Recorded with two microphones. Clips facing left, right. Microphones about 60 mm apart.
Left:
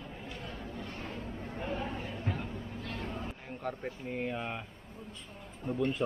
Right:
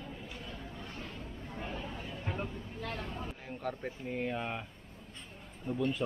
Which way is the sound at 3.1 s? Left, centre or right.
Centre.